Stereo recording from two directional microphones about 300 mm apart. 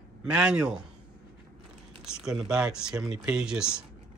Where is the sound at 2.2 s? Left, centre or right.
Centre.